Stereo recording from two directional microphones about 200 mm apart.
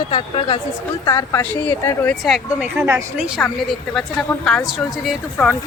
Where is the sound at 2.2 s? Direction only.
Centre (ahead or behind).